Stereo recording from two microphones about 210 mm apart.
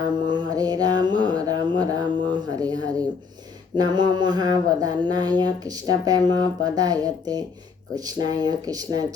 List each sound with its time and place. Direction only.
0.3 s music: 20° right (ahead or behind)
3.8 s speech: 20° right (ahead or behind)